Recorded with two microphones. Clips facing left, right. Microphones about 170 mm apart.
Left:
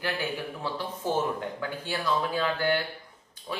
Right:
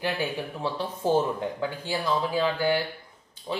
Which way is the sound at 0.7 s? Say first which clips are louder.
Right 5 dB; 25° right (ahead or behind).